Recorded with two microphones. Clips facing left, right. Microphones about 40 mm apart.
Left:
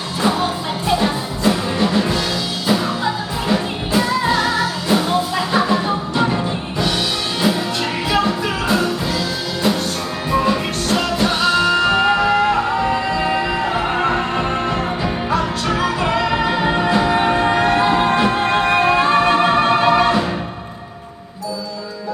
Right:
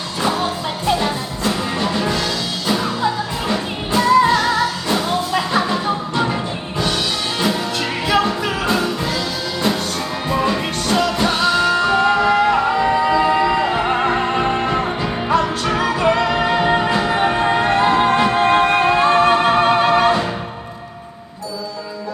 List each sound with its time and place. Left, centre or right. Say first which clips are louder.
0.2 s music: left 1 dB; centre